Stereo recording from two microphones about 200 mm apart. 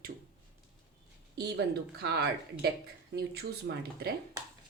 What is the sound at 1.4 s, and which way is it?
Speech, 55° right (ahead or behind).